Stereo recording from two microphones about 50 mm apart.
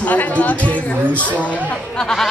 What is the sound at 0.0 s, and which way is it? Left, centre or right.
Speech, left.